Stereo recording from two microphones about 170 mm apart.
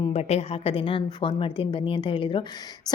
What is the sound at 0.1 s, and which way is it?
A woman's voice, 40° left (ahead or behind).